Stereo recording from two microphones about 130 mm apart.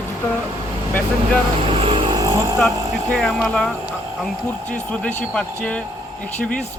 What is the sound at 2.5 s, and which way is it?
Speech, 5° left (ahead or behind).